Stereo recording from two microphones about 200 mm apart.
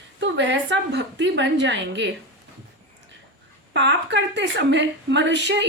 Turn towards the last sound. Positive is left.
turn(degrees=-60)  # may be behind; listen again after turning